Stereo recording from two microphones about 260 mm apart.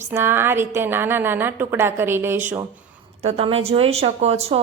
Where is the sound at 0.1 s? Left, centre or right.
Centre.